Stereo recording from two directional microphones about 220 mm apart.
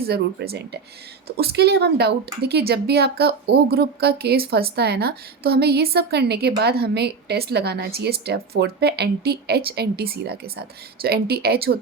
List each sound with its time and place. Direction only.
0.0 s speech: 45° right (ahead or behind)